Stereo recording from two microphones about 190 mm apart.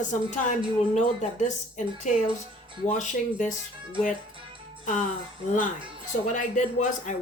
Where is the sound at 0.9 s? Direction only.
40° left (ahead or behind).